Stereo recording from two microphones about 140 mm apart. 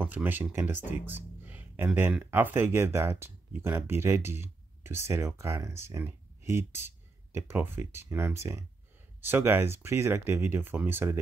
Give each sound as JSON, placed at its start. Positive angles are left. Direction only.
{"t": 0.0, "sound": "speech", "side_deg": -15}